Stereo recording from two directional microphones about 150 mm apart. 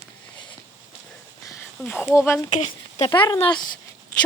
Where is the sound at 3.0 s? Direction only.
30° left (ahead or behind).